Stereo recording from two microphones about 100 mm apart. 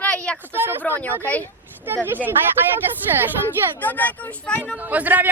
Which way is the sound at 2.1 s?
20° right (ahead or behind).